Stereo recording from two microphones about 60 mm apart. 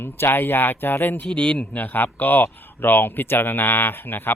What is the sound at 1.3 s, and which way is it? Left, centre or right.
Speech, centre.